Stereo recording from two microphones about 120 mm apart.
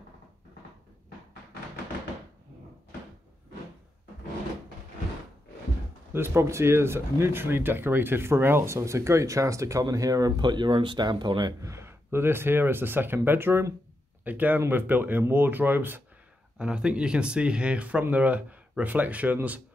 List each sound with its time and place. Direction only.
6.1 s speech: 20° right (ahead or behind)
11.7 s speech: 20° right (ahead or behind)